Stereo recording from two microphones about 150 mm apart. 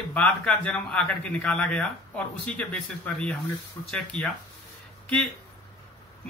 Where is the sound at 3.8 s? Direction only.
20° left (ahead or behind).